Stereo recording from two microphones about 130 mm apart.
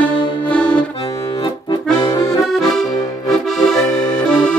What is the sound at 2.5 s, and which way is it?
Accordion, 5° left (ahead or behind).